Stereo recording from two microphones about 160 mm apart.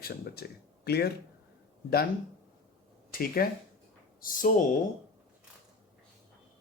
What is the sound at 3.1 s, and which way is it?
Speech, 65° left (ahead or behind).